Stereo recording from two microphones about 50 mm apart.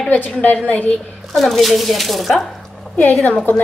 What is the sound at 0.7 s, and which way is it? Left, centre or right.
Speech, left.